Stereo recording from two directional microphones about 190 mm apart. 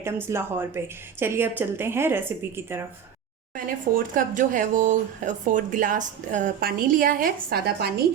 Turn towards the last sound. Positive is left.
turn(degrees=-55)  # may be behind; listen again after turning